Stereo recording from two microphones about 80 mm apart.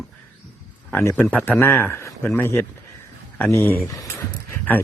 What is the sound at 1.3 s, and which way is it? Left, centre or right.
Speech, left.